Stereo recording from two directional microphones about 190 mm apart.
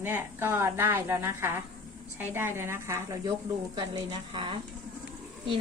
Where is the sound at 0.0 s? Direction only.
10° right (ahead or behind).